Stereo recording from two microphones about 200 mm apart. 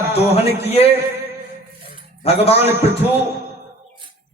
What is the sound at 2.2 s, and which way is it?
Speech, 30° left (ahead or behind).